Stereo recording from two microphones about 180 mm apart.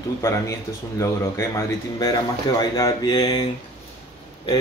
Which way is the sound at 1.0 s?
15° left (ahead or behind).